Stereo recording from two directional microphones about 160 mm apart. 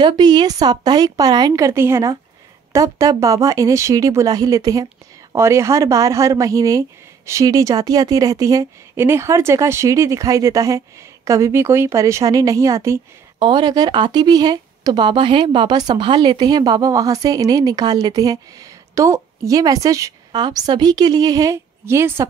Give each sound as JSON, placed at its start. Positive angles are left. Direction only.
{"t": 0.0, "sound": "speech", "side_deg": -30}
{"t": 13.4, "sound": "speech", "side_deg": -30}